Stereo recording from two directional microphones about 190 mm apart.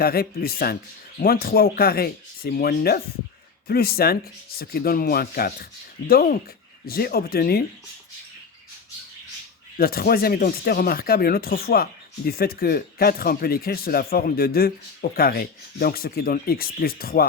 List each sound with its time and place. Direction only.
0.0 s speech: 50° left (ahead or behind)
9.7 s speech: 50° left (ahead or behind)